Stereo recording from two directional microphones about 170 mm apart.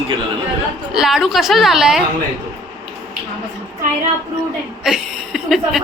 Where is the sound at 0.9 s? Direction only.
Centre (ahead or behind).